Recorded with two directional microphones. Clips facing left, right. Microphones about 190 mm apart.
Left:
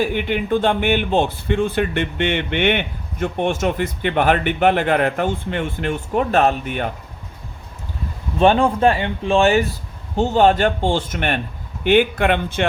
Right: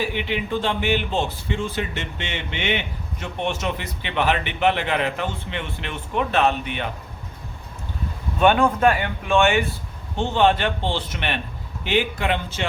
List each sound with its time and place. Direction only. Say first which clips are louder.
0.0 s speech: left 5 dB; 50° left (ahead or behind)
8.4 s a man's voice: left 3 dB; 30° left (ahead or behind); by 12.6 s 55° left (ahead or behind)